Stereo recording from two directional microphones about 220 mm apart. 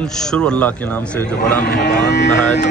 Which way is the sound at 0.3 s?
5° left (ahead or behind).